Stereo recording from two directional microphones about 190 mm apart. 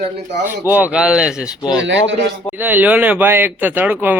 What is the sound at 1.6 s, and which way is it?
Speech, 20° left (ahead or behind).